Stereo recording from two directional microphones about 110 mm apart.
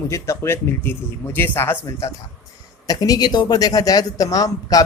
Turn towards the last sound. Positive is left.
turn(degrees=30)  # may be behind; listen again after turning